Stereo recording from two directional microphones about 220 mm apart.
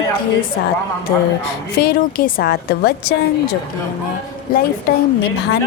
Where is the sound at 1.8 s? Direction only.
45° left (ahead or behind).